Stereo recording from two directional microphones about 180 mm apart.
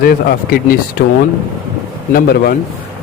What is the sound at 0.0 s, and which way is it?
Speech, 55° left (ahead or behind).